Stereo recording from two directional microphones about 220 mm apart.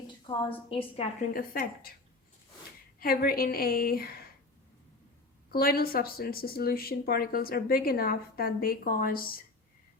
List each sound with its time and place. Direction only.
0.3 s a woman's voice: 20° left (ahead or behind)
1.3 s speech: 40° left (ahead or behind)
3.0 s speech: 45° left (ahead or behind)
5.5 s speech: 45° left (ahead or behind)